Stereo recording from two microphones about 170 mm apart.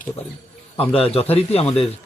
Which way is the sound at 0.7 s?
35° left (ahead or behind).